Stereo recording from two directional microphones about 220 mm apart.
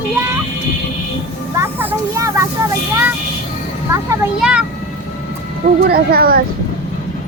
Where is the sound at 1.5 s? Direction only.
10° right (ahead or behind).